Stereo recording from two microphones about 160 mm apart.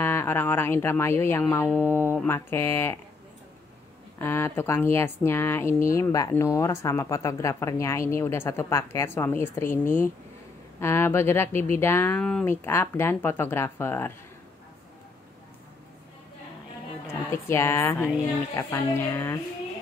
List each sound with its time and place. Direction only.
0.0 s speech: 15° left (ahead or behind)
4.2 s speech: 15° left (ahead or behind)
12.2 s speech: 5° left (ahead or behind)
12.4 s speech: 15° left (ahead or behind)
17.1 s a woman's voice: 15° left (ahead or behind)